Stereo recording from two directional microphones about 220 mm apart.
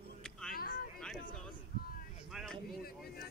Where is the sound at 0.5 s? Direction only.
40° left (ahead or behind).